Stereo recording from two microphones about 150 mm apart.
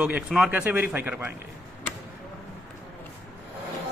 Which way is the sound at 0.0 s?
5° right (ahead or behind).